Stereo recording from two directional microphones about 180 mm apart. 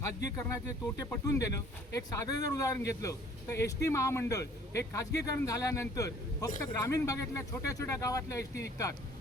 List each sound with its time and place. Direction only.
0.2 s speech: 20° left (ahead or behind)